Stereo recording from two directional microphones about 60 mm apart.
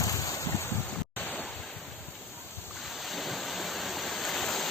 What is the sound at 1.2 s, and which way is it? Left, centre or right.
Waves, left.